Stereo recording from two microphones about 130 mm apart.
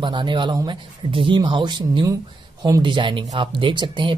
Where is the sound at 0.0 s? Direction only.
35° right (ahead or behind).